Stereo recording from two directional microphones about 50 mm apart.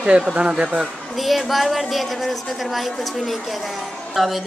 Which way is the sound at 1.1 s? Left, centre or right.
Centre.